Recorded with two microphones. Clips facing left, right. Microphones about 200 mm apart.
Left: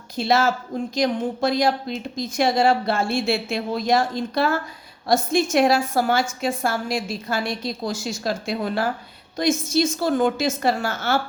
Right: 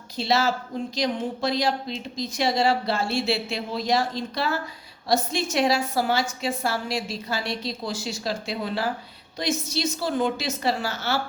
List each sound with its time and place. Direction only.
0.2 s a woman's voice: 50° left (ahead or behind)